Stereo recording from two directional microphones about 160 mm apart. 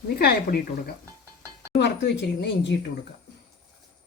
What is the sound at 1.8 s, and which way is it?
Speech, 90° left.